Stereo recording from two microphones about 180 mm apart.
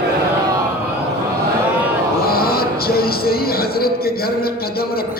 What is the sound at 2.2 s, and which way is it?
A man's voice, 55° left (ahead or behind).